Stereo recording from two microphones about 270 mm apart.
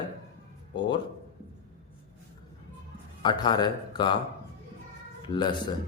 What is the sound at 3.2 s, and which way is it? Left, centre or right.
Speech, centre.